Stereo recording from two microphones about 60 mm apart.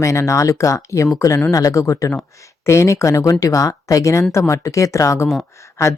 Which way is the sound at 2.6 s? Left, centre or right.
Left.